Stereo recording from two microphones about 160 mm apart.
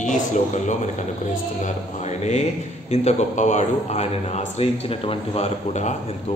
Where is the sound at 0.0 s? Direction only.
50° left (ahead or behind).